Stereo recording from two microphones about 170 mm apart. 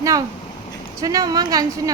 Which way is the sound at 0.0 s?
20° right (ahead or behind).